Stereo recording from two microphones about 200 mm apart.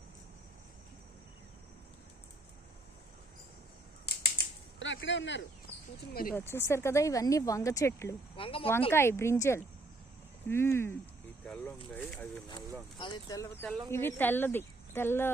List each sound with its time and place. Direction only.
4.0 s cap gun: 50° left (ahead or behind)
6.5 s speech: 15° left (ahead or behind)
8.4 s speech: 25° left (ahead or behind)
8.9 s speech: 10° left (ahead or behind)
13.0 s speech: 20° left (ahead or behind)